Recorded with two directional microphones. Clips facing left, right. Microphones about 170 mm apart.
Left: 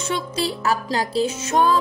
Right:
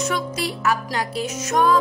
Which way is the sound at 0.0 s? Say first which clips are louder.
Even; 30° left (ahead or behind).